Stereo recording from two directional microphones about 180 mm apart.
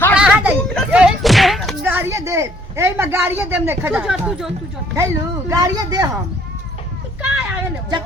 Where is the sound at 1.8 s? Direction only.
10° right (ahead or behind).